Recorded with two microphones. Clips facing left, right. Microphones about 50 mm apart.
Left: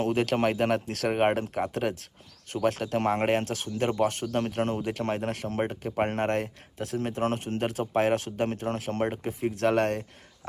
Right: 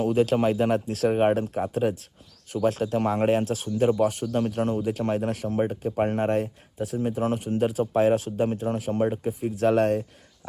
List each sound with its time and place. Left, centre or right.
0.0 s speech: left
1.8 s speech: left
4.3 s speech: left